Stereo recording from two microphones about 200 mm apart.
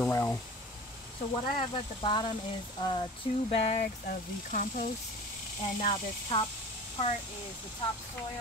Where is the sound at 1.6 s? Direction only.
25° left (ahead or behind).